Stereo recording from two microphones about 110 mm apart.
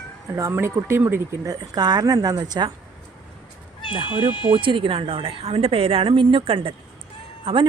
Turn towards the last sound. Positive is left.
turn(degrees=-50)  # may be behind; listen again after turning